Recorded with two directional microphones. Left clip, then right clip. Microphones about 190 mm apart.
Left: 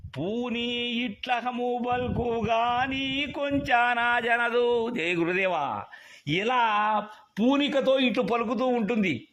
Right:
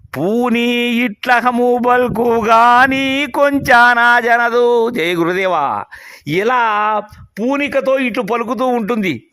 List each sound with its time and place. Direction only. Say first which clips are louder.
0.2 s mantra: right 15 dB; 50° right (ahead or behind); by 5.8 s 35° right (ahead or behind)
6.3 s speech: right 10 dB; 35° right (ahead or behind)